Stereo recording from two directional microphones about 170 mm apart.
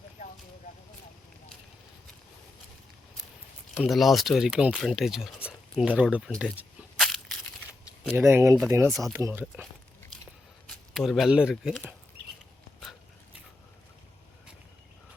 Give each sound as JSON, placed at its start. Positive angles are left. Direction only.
{"t": 3.8, "sound": "speech", "side_deg": 0}
{"t": 6.4, "sound": "tearing", "side_deg": -5}
{"t": 8.7, "sound": "speech", "side_deg": -15}
{"t": 10.7, "sound": "speech", "side_deg": 0}